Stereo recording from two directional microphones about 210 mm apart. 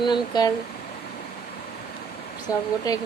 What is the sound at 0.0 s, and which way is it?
Speech, 20° left (ahead or behind).